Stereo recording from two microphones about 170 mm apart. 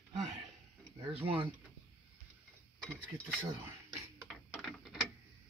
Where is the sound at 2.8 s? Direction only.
5° left (ahead or behind).